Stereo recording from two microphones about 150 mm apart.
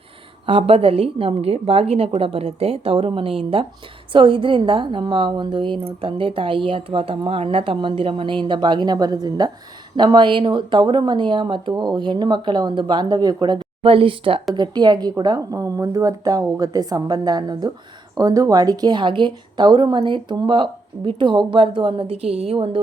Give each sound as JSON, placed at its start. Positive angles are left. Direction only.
{"t": 0.4, "sound": "a woman's voice", "side_deg": -40}